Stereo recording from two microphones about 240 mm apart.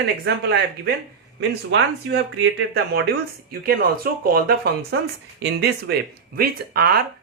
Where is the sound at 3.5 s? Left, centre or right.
Right.